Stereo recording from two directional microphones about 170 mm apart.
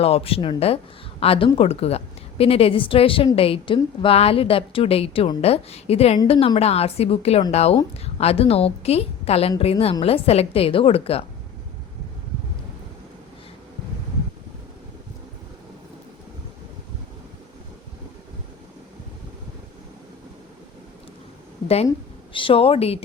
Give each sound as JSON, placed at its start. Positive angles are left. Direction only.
{"t": 0.0, "sound": "a woman's voice", "side_deg": 35}
{"t": 21.8, "sound": "speech", "side_deg": 30}